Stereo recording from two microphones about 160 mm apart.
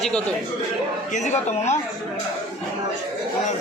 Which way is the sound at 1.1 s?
45° left (ahead or behind).